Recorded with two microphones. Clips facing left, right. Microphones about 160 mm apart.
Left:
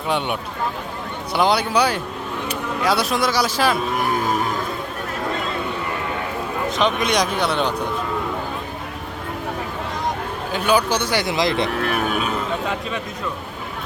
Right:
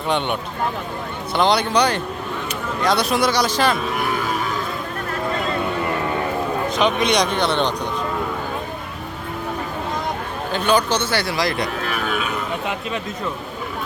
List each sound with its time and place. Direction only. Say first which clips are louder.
1.3 s speech: right 1 dB; 5° left (ahead or behind)
6.7 s speech: even; centre (ahead or behind)
10.5 s speech: even; 10° left (ahead or behind)
11.8 s speech: left 2 dB; 50° left (ahead or behind)